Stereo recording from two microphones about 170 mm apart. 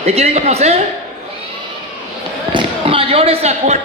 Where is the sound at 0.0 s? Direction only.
40° right (ahead or behind).